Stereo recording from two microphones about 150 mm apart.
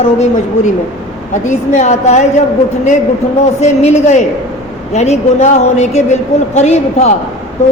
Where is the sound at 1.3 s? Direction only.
55° left (ahead or behind).